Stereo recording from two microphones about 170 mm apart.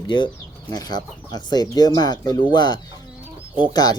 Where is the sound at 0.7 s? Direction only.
25° left (ahead or behind).